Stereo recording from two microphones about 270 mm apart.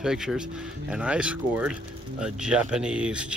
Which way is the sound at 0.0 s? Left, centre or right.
Centre.